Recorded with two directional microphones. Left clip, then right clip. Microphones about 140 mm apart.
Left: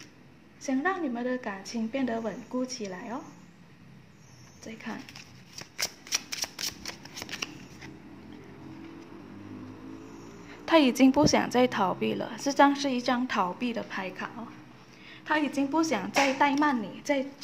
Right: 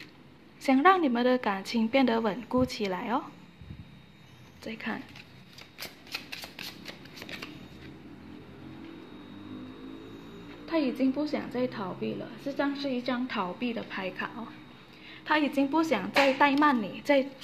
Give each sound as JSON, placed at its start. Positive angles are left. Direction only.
{"t": 0.7, "sound": "a woman's voice", "side_deg": -35}
{"t": 4.6, "sound": "speech", "side_deg": -20}
{"t": 10.6, "sound": "a woman's voice", "side_deg": 50}
{"t": 11.3, "sound": "a woman's voice", "side_deg": 40}
{"t": 13.8, "sound": "a woman's voice", "side_deg": 0}